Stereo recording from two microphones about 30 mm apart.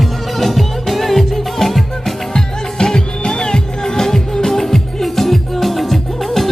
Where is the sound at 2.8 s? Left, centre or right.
Left.